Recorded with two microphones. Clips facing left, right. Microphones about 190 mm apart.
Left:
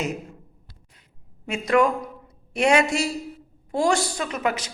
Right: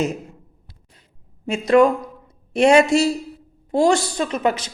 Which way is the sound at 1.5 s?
25° right (ahead or behind).